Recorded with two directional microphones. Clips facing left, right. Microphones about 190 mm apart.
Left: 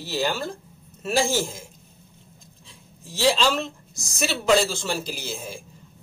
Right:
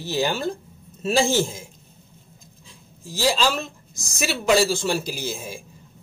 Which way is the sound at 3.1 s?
Centre (ahead or behind).